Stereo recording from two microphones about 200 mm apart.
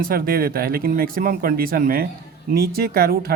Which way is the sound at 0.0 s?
45° right (ahead or behind).